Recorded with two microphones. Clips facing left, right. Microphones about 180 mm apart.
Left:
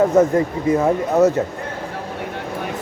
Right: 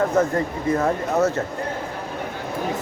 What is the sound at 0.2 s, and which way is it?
Speech, 15° left (ahead or behind).